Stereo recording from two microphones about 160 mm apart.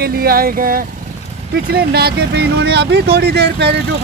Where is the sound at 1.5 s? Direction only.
80° right.